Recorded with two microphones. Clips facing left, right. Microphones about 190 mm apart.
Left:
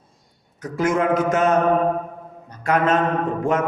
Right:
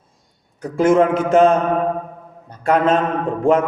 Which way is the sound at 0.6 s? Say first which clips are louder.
Right 6 dB; 30° right (ahead or behind).